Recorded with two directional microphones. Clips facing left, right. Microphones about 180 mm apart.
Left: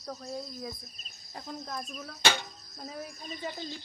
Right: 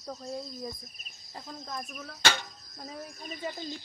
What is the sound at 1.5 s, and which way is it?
Cricket, 10° left (ahead or behind).